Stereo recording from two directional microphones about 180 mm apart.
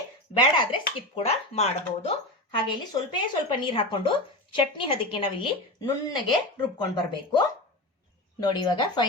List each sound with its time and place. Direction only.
0.3 s speech: 25° left (ahead or behind)